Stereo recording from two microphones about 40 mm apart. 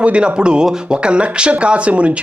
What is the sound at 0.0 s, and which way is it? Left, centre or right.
Speech, right.